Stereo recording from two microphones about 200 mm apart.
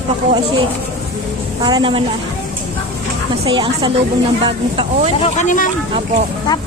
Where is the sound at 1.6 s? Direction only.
20° right (ahead or behind).